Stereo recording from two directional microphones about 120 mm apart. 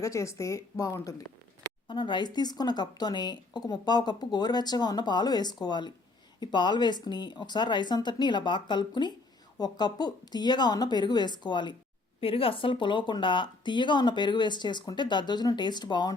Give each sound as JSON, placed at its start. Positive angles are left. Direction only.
{"t": 0.0, "sound": "a woman's voice", "side_deg": 25}
{"t": 1.9, "sound": "a woman's voice", "side_deg": 40}
{"t": 12.2, "sound": "a woman's voice", "side_deg": 50}